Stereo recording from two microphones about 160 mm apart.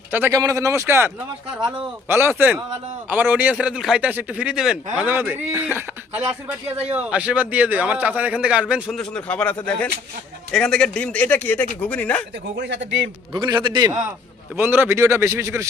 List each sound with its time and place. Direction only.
0.1 s a man's voice: 15° right (ahead or behind)
9.0 s speech: 5° left (ahead or behind)
12.5 s speech: 90° right
13.3 s a man's voice: 30° right (ahead or behind)
14.5 s a man's voice: 15° right (ahead or behind)